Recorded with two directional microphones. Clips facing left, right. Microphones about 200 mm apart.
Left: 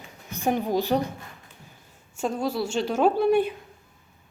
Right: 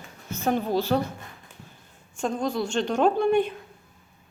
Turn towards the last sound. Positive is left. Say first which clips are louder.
# left 1 dB
turn(degrees=5)  # may be behind; listen again after turning